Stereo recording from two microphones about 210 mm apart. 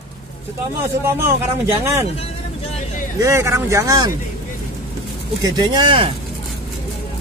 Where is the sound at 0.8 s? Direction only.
10° right (ahead or behind).